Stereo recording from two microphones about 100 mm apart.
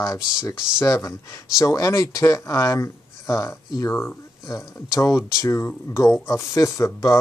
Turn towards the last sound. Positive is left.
turn(degrees=30)  # may be behind; listen again after turning